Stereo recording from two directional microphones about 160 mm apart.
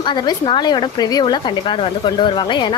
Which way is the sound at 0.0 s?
25° left (ahead or behind).